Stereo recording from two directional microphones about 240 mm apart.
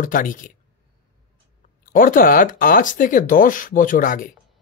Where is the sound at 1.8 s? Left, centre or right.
Left.